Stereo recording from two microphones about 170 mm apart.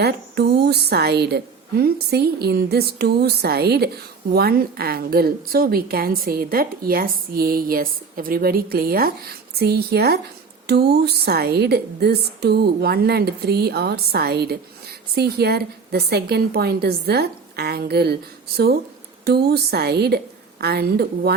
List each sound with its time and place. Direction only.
0.0 s a woman's voice: 75° right (ahead or behind)